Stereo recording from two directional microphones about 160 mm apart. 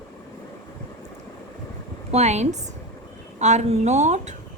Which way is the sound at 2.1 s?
45° right (ahead or behind).